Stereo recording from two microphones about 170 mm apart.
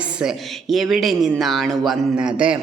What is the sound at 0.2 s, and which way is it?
Speech, centre (ahead or behind).